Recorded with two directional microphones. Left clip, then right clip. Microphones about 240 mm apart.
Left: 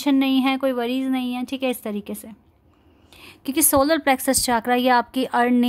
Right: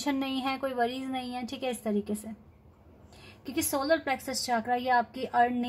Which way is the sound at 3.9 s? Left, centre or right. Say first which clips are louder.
Left 9 dB; left.